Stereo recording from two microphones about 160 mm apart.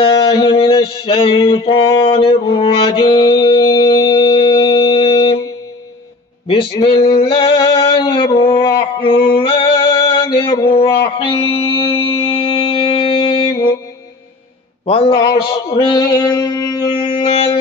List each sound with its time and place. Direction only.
0.0 s a sound: 30° left (ahead or behind)
6.4 s male singing: 35° left (ahead or behind)
11.1 s music: 30° left (ahead or behind)
14.9 s a man's voice: 35° left (ahead or behind)
15.9 s music: 25° left (ahead or behind)